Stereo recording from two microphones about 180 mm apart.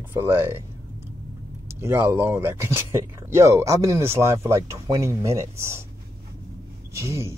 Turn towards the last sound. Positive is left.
turn(degrees=-15)  # may be behind; listen again after turning